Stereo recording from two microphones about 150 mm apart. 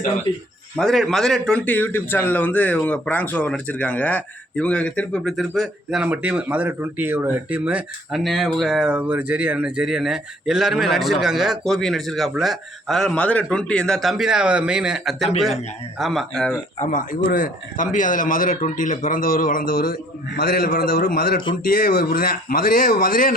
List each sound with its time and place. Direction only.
0.8 s a man's voice: centre (ahead or behind)
16.7 s a man's voice: 55° left (ahead or behind)